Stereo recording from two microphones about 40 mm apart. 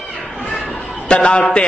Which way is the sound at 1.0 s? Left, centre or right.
Left.